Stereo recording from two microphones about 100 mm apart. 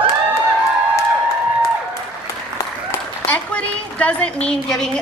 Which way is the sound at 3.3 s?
15° left (ahead or behind).